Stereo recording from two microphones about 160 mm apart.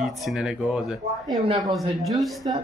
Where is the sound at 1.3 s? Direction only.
30° right (ahead or behind).